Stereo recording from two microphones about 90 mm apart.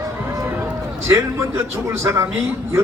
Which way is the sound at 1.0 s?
30° right (ahead or behind).